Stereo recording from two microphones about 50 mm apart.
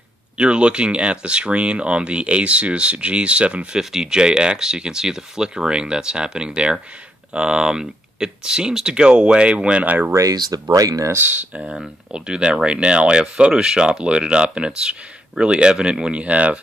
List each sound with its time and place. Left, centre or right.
0.4 s speech: right
3.7 s speech: centre
9.8 s speech: right
10.9 s speech: right
11.1 s speech: right
11.6 s speech: centre